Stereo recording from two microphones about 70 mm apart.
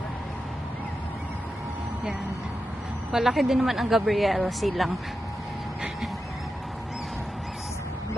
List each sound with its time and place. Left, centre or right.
3.1 s a woman's voice: centre